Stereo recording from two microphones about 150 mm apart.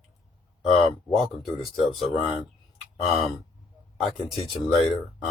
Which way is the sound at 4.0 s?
Centre (ahead or behind).